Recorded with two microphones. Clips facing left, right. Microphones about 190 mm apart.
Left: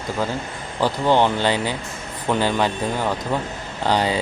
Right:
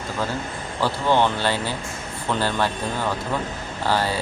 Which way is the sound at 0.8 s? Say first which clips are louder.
Left 2 dB; 15° left (ahead or behind).